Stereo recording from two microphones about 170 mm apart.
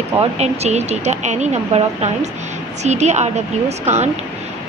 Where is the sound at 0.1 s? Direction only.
35° right (ahead or behind).